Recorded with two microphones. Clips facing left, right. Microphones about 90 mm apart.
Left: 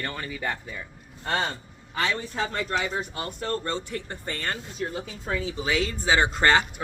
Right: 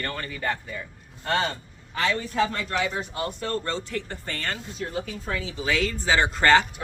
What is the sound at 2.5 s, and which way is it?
Speech, 25° left (ahead or behind).